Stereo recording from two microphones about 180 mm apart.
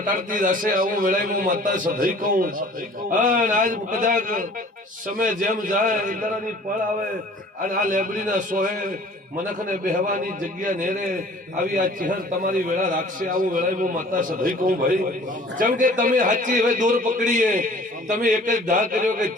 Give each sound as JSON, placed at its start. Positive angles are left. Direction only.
{"t": 0.0, "sound": "a man's voice", "side_deg": -50}
{"t": 7.6, "sound": "a man's voice", "side_deg": -50}